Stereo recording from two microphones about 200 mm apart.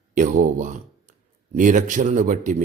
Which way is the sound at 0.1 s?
40° right (ahead or behind).